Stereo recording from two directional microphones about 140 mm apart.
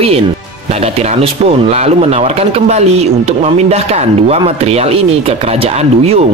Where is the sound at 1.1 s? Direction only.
50° right (ahead or behind).